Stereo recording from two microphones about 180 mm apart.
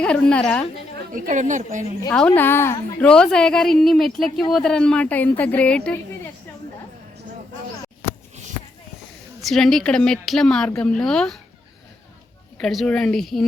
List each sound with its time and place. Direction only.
0.0 s a woman's voice: 5° left (ahead or behind)
1.1 s a woman's voice: 45° right (ahead or behind)
2.1 s a woman's voice: 10° left (ahead or behind)
9.4 s a woman's voice: centre (ahead or behind)
12.5 s a woman's voice: 5° left (ahead or behind)